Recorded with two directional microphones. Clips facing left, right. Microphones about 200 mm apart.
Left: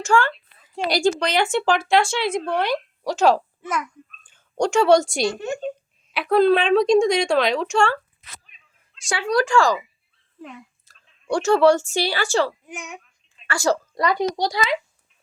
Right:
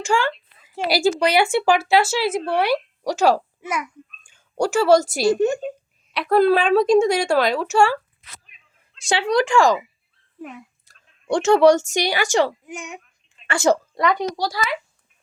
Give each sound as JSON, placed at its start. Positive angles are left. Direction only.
{"t": 0.0, "sound": "a child's voice", "side_deg": -10}
{"t": 9.0, "sound": "speech", "side_deg": -20}
{"t": 10.4, "sound": "a sound", "side_deg": -5}
{"t": 11.3, "sound": "speech", "side_deg": -20}
{"t": 13.5, "sound": "speech", "side_deg": -20}
{"t": 14.5, "sound": "a child's voice", "side_deg": 20}